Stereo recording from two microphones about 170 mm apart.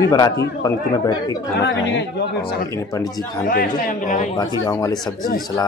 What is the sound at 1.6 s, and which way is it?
Speech, 90° left.